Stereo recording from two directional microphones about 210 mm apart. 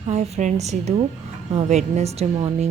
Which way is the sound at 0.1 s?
35° right (ahead or behind).